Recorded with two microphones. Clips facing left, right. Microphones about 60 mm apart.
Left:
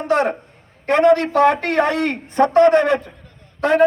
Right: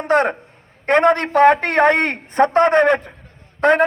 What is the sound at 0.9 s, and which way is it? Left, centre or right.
A man's voice, right.